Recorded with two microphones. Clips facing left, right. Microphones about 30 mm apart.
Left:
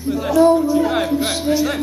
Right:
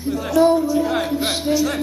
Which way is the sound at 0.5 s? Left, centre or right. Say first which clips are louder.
Left 2 dB; centre.